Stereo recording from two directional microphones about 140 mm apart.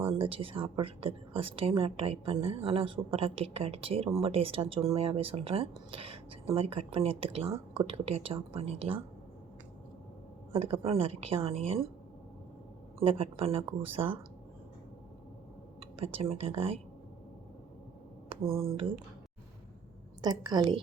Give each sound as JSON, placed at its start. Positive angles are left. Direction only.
{"t": 0.1, "sound": "a woman's voice", "side_deg": -40}
{"t": 10.5, "sound": "speech", "side_deg": -45}
{"t": 13.0, "sound": "a woman's voice", "side_deg": -40}
{"t": 16.0, "sound": "speech", "side_deg": -45}
{"t": 18.3, "sound": "speech", "side_deg": -40}
{"t": 20.2, "sound": "a woman's voice", "side_deg": -30}